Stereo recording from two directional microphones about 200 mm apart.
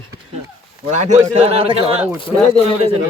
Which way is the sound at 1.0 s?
35° right (ahead or behind).